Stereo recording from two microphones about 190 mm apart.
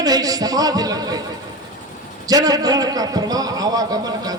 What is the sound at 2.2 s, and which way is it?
A man's voice, 20° right (ahead or behind).